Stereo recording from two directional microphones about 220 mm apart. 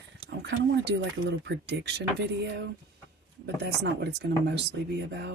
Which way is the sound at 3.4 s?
50° right (ahead or behind).